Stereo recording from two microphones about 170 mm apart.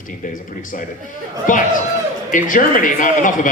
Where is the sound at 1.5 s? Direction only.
50° left (ahead or behind).